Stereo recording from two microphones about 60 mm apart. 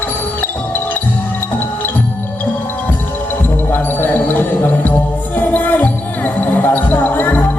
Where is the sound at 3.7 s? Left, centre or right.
Left.